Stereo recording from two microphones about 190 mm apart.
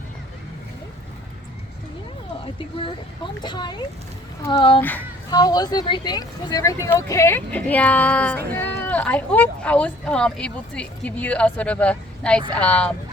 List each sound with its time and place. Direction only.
3.4 s speech: 25° left (ahead or behind)
4.8 s speech: 10° left (ahead or behind)
5.3 s speech: 20° left (ahead or behind)